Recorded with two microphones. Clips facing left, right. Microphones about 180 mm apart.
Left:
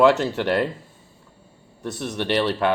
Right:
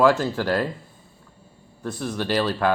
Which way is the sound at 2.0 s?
25° left (ahead or behind).